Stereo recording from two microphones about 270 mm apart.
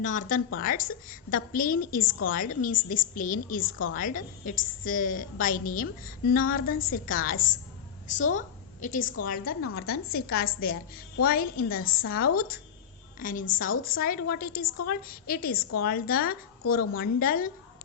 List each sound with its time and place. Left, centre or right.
0.0 s a woman's voice: left
8.4 s a sound: left
9.2 s a woman's voice: left